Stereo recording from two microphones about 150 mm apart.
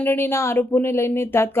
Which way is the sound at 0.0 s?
15° left (ahead or behind).